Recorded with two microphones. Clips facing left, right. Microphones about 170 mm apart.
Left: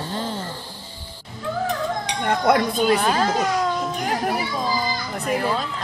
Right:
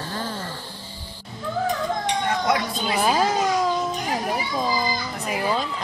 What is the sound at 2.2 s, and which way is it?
Dishes, 55° left (ahead or behind).